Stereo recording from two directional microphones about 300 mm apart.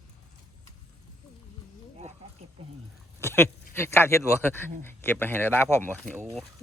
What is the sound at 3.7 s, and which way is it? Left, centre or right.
Speech, centre.